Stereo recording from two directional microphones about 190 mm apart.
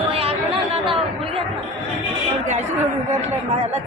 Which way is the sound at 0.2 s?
30° right (ahead or behind).